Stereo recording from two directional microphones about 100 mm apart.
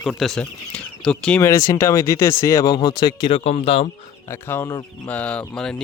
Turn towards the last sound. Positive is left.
turn(degrees=10)  # may be behind; listen again after turning